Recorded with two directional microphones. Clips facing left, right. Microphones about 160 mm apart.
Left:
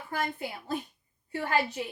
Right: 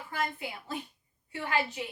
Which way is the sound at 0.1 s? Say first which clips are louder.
Left 2 dB; 45° left (ahead or behind).